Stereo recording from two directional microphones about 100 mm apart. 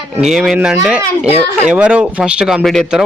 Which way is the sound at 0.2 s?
5° right (ahead or behind).